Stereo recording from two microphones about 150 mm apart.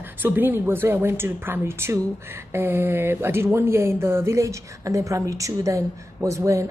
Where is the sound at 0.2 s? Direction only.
10° right (ahead or behind).